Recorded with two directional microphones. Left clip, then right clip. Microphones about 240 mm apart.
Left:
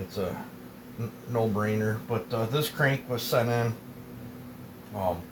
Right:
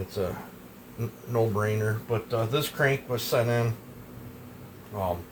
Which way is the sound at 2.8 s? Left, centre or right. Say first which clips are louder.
Right 2 dB; right.